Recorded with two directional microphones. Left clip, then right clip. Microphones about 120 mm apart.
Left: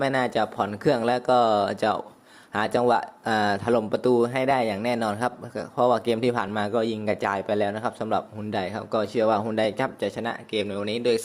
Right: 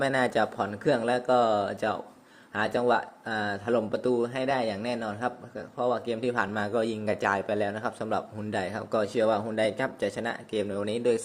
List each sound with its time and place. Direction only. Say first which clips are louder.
0.0 s speech: left 2 dB; 15° left (ahead or behind); by 6.3 s 40° left (ahead or behind)
6.3 s speech: left 2 dB; 20° left (ahead or behind)
10.5 s speech: left 2 dB; 5° left (ahead or behind)